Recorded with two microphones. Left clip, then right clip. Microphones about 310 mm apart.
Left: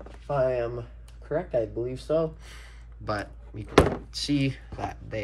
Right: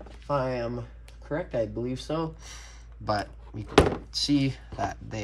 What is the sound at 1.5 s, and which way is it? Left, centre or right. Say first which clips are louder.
Speech: left 2 dB; right.